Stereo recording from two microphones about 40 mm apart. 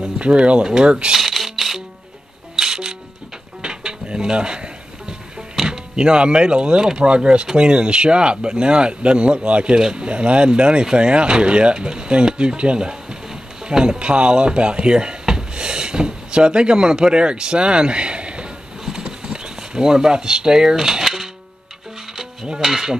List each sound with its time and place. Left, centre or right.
0.2 s speech: right
1.1 s rattle: centre
2.5 s music: centre
3.6 s dishes: right
5.7 s speech: right
18.9 s a sound: centre
21.0 s music: centre
22.6 s a sound: centre